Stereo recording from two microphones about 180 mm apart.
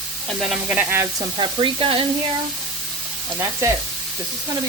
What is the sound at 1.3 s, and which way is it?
Speech, 30° right (ahead or behind).